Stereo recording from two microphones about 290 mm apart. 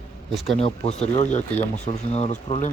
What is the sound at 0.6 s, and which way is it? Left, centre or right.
Speech, left.